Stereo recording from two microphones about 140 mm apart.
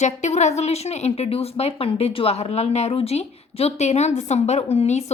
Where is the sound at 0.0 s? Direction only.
55° left (ahead or behind).